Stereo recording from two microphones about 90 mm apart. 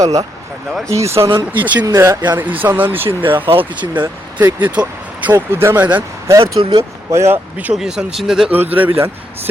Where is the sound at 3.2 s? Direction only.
70° right (ahead or behind).